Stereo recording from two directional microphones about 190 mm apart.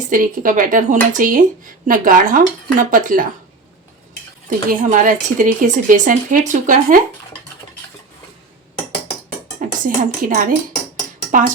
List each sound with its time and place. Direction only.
0.1 s speech: 45° right (ahead or behind)
4.4 s speech: 40° right (ahead or behind)
9.6 s speech: 45° right (ahead or behind)